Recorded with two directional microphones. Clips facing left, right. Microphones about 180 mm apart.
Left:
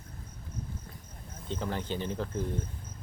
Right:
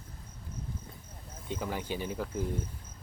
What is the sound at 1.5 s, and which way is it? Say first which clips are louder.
Speech: left 1 dB; 10° right (ahead or behind).